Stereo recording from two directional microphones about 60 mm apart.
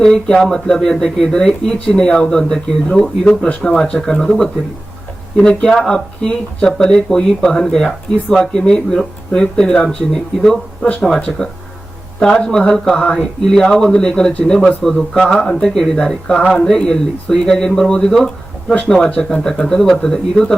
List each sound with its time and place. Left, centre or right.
0.0 s speech: centre
12.2 s speech: centre